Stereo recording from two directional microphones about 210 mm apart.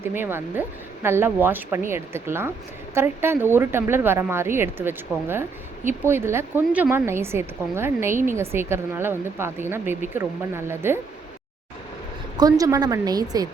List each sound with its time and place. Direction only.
0.0 s a woman's voice: 10° right (ahead or behind)
12.4 s a woman's voice: 15° right (ahead or behind)